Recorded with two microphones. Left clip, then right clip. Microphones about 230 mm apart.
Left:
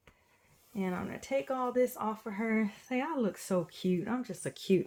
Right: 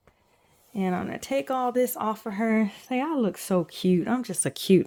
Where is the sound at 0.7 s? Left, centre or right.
Right.